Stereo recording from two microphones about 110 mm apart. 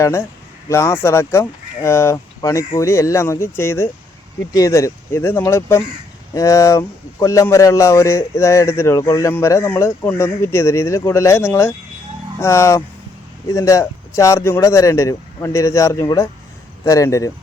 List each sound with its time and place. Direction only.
0.0 s a man's voice: 25° left (ahead or behind)